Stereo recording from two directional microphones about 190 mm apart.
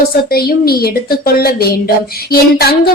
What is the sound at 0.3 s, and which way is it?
A woman's voice, 55° left (ahead or behind).